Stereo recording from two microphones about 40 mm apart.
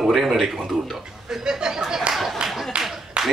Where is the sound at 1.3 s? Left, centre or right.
Centre.